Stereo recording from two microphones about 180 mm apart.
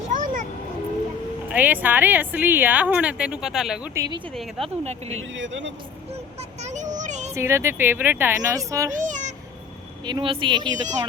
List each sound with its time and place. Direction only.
0.1 s vehicle: 45° right (ahead or behind)
1.5 s a woman's voice: 10° right (ahead or behind)
3.9 s speech: 20° right (ahead or behind)
4.4 s speech: centre (ahead or behind)
4.8 s speech: 35° right (ahead or behind)
5.3 s speech: 90° right
6.6 s a sound: 40° right (ahead or behind)
7.3 s a woman's voice: 15° right (ahead or behind)
8.9 s a sound: 45° right (ahead or behind)
10.1 s speech: 25° right (ahead or behind)